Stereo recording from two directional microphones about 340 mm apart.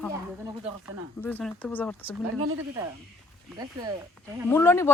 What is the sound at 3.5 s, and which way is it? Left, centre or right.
Speech, centre.